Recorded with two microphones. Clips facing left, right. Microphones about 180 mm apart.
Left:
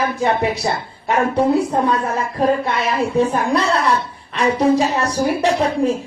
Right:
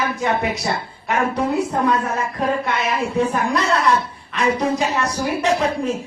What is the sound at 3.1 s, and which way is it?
A woman's voice, 30° left (ahead or behind).